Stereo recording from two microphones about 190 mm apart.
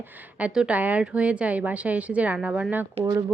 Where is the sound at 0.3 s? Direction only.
5° right (ahead or behind).